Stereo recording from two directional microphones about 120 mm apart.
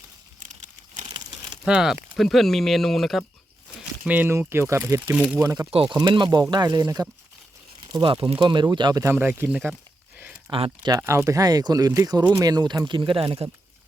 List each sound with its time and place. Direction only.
0.4 s crumpling: 90° right
1.6 s speech: 5° right (ahead or behind)
4.0 s speech: 15° right (ahead or behind)
5.1 s speech: 5° right (ahead or behind)
5.4 s speech: 25° right (ahead or behind)
5.7 s speech: 45° right (ahead or behind)
9.1 s speech: 15° right (ahead or behind)
10.2 s a sound: 15° right (ahead or behind)
10.5 s speech: 45° right (ahead or behind)
10.9 s speech: 20° right (ahead or behind)
12.9 s speech: 45° right (ahead or behind)